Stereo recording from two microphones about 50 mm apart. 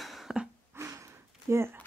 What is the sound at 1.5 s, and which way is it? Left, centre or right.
Speech, right.